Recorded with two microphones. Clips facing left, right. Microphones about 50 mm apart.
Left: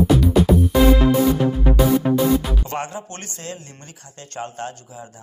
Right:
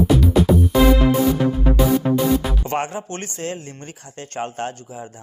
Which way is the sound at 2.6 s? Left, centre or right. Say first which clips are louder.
Right 4 dB; right.